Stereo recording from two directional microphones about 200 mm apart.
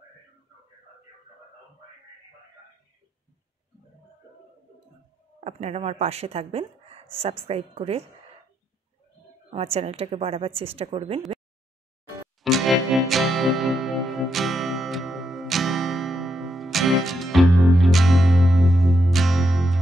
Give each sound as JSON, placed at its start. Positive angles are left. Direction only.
{"t": 5.4, "sound": "speech", "side_deg": -30}
{"t": 9.5, "sound": "a woman's voice", "side_deg": -30}
{"t": 12.4, "sound": "music", "side_deg": 0}